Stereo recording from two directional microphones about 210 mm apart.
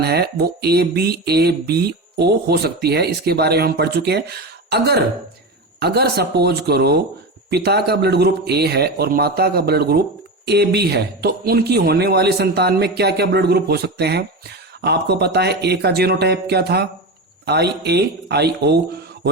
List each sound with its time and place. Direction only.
0.0 s speech: 50° right (ahead or behind)